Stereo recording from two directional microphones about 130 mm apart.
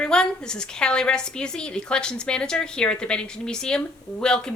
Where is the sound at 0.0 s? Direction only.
5° left (ahead or behind).